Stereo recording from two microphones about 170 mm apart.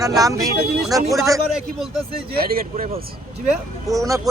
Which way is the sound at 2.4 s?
60° right (ahead or behind).